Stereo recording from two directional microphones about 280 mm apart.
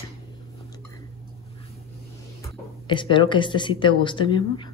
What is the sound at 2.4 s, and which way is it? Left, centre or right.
Speech, centre.